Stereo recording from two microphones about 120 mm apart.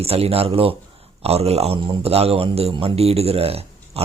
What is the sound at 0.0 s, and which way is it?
A man's voice, 55° right (ahead or behind).